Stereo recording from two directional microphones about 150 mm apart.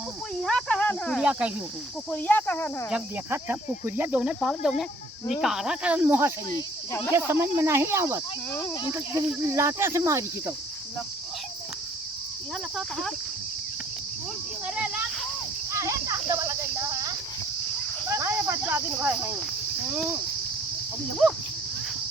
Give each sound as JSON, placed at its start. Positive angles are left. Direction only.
{"t": 0.4, "sound": "speech", "side_deg": 5}
{"t": 1.2, "sound": "cricket", "side_deg": -5}
{"t": 2.0, "sound": "speech", "side_deg": 10}
{"t": 2.9, "sound": "cricket", "side_deg": -15}
{"t": 10.0, "sound": "speech", "side_deg": -20}
{"t": 12.7, "sound": "speech", "side_deg": 0}
{"t": 15.8, "sound": "a sound", "side_deg": -20}
{"t": 18.1, "sound": "cricket", "side_deg": -15}
{"t": 21.1, "sound": "speech", "side_deg": 0}